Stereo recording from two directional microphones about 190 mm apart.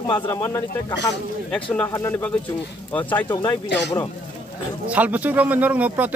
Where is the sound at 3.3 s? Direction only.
20° left (ahead or behind).